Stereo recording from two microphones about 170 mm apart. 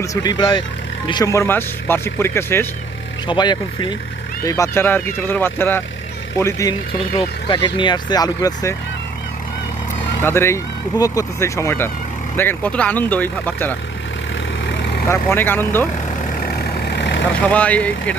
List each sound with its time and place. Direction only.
0.0 s speech: 20° left (ahead or behind)
3.2 s speech: 25° left (ahead or behind)
7.2 s speech: 30° left (ahead or behind)
10.2 s speech: 15° left (ahead or behind)
14.7 s vehicle: 90° left
15.1 s speech: 15° left (ahead or behind)
16.8 s vehicle: 85° left
17.4 s speech: 10° left (ahead or behind)